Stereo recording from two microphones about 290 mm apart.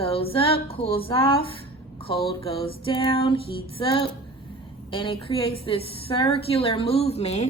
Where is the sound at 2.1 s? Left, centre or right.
Centre.